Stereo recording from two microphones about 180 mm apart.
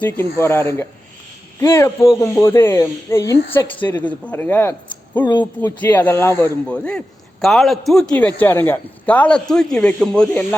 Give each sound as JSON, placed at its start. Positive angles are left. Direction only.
{"t": 0.0, "sound": "speech", "side_deg": 10}
{"t": 5.2, "sound": "speech", "side_deg": 25}
{"t": 5.5, "sound": "a man's voice", "side_deg": 10}